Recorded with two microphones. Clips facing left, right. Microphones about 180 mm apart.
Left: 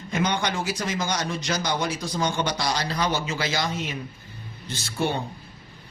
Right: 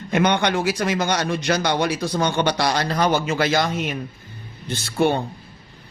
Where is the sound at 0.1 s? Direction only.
65° right (ahead or behind).